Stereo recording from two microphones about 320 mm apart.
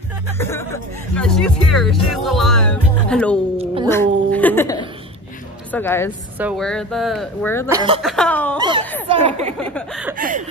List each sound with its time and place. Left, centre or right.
0.4 s speech: centre
3.5 s a sound: centre
4.3 s a sound: centre
5.7 s speech: centre
7.6 s speech: centre
8.0 s speech: centre
8.5 s speech: centre
9.6 s speech: centre
10.1 s speech: right